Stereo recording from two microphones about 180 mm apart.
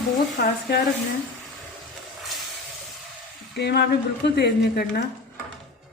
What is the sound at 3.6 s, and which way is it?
A woman's voice, 70° left (ahead or behind).